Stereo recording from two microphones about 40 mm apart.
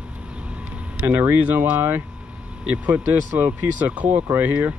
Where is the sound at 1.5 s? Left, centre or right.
Right.